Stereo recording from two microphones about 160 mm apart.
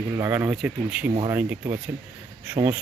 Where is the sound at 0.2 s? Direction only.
10° right (ahead or behind).